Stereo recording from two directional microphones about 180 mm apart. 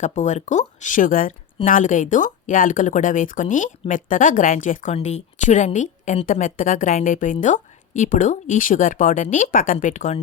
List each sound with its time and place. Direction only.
0.0 s speech: 40° left (ahead or behind)